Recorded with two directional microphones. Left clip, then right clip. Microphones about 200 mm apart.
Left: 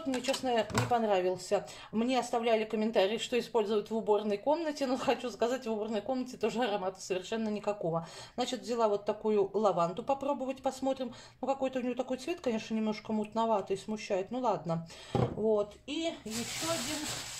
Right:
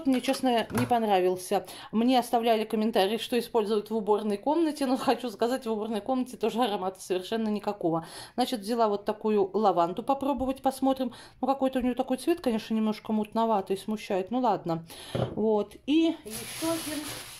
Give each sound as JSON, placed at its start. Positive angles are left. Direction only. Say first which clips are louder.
{"t": 0.2, "sound": "speech", "louder": "right 4 dB", "side_deg": -45}
{"t": 15.5, "sound": "speech", "louder": "right 6 dB", "side_deg": -50}